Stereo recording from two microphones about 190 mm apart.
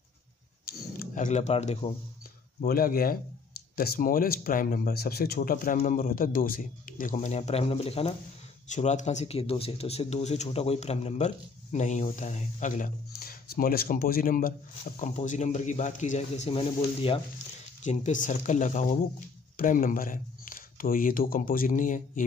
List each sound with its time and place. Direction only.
0.9 s speech: 40° left (ahead or behind)
2.6 s speech: 50° left (ahead or behind); by 17.2 s 30° left (ahead or behind)
17.8 s speech: 40° left (ahead or behind)